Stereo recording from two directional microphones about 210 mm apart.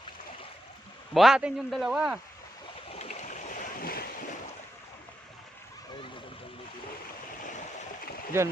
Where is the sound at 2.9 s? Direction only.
30° left (ahead or behind).